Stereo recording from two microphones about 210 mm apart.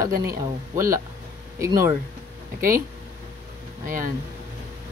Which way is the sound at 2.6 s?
40° right (ahead or behind).